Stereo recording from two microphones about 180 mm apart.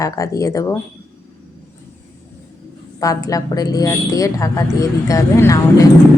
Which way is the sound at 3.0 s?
20° left (ahead or behind).